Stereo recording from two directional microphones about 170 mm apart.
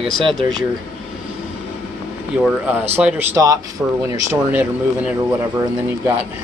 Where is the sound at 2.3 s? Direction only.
10° right (ahead or behind).